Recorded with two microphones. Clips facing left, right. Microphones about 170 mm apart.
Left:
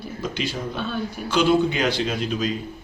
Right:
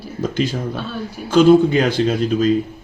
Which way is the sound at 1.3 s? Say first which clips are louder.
Right 8 dB; 45° right (ahead or behind).